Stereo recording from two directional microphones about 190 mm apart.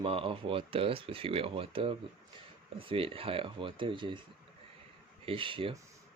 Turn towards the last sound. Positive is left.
turn(degrees=-30)  # may be behind; listen again after turning